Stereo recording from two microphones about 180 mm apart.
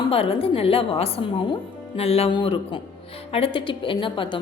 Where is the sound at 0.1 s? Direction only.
30° left (ahead or behind).